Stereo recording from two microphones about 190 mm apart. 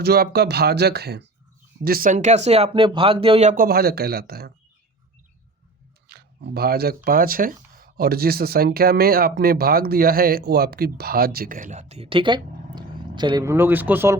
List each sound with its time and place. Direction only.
0.0 s speech: 55° right (ahead or behind)
6.1 s speech: 55° right (ahead or behind); by 14.2 s 10° right (ahead or behind)